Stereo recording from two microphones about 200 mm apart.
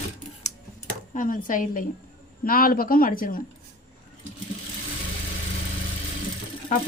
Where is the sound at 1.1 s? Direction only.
40° left (ahead or behind).